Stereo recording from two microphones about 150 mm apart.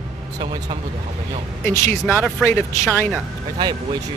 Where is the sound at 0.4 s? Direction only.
40° right (ahead or behind).